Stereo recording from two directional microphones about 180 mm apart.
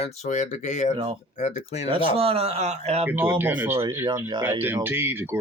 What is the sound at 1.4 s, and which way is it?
Speech, 40° left (ahead or behind).